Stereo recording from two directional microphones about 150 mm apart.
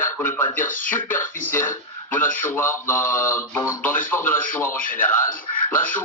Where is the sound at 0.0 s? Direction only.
15° left (ahead or behind).